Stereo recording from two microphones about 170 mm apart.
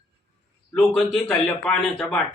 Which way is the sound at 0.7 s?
5° left (ahead or behind).